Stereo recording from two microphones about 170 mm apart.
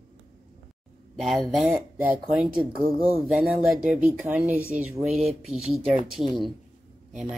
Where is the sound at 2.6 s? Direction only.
35° right (ahead or behind).